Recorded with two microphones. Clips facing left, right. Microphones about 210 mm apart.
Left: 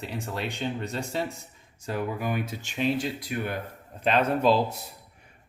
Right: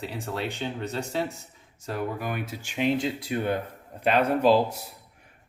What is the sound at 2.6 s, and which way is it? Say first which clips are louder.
Speech: right 4 dB; 20° right (ahead or behind).